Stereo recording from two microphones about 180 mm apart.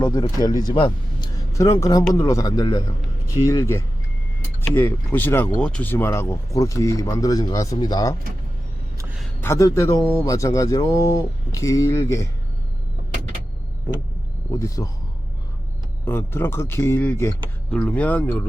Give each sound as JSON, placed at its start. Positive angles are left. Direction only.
{"t": 0.0, "sound": "speech", "side_deg": 20}
{"t": 9.4, "sound": "speech", "side_deg": 15}
{"t": 14.8, "sound": "speech", "side_deg": 15}
{"t": 16.0, "sound": "speech", "side_deg": 15}